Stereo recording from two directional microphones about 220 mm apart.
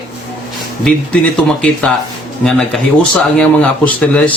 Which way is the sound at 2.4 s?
Centre (ahead or behind).